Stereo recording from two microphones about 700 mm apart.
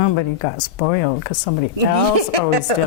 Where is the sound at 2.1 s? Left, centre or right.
Right.